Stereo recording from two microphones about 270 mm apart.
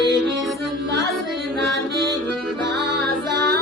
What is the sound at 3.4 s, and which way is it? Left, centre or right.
Music, right.